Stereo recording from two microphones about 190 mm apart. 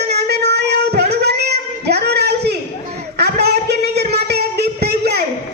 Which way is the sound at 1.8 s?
60° right (ahead or behind).